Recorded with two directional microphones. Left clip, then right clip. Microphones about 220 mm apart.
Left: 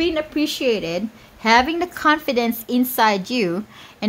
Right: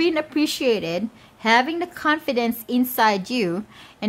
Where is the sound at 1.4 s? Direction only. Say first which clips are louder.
Left 3 dB; 5° left (ahead or behind).